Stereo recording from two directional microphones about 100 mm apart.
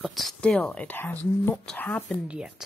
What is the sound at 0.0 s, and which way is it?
Speech, centre (ahead or behind).